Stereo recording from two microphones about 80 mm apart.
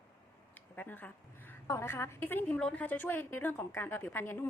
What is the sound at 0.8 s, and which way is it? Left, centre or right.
Speech, left.